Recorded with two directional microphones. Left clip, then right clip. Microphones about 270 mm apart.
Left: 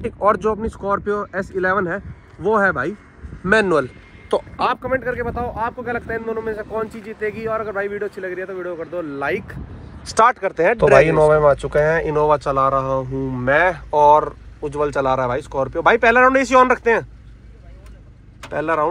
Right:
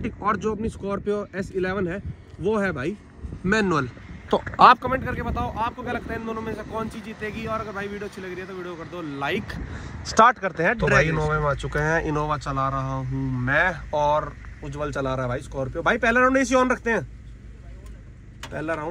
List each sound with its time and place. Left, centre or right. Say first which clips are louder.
0.0 s speech: left 8 dB; centre
4.3 s a man's voice: right 5 dB; centre
18.4 s speech: left 10 dB; centre